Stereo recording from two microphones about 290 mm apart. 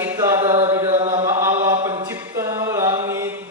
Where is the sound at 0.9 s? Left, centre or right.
Right.